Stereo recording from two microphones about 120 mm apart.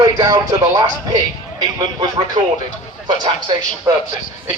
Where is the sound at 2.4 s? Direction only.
60° right (ahead or behind).